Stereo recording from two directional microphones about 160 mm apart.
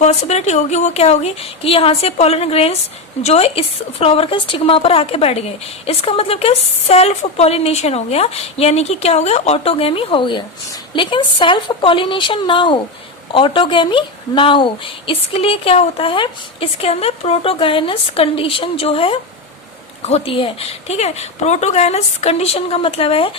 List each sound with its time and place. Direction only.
0.0 s a woman's voice: 45° left (ahead or behind)